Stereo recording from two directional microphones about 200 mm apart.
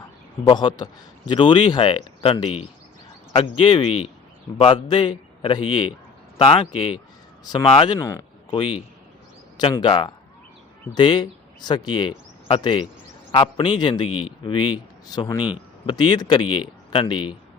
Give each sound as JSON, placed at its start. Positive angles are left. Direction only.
{"t": 0.4, "sound": "a man's voice", "side_deg": 20}